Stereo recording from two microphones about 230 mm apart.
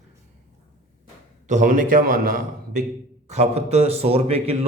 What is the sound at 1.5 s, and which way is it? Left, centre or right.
A man's voice, right.